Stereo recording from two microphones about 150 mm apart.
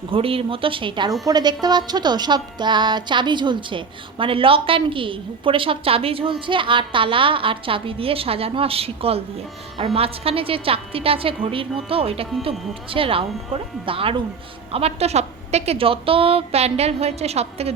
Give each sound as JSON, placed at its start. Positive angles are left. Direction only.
{"t": 0.1, "sound": "a woman's voice", "side_deg": -40}